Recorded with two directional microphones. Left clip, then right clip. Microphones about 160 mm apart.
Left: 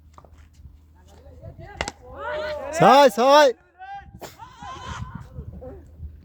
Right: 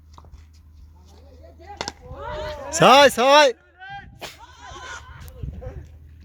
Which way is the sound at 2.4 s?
20° left (ahead or behind).